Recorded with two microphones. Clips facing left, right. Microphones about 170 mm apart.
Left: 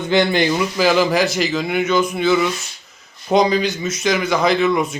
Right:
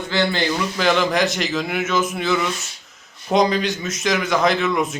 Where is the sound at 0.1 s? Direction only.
15° left (ahead or behind).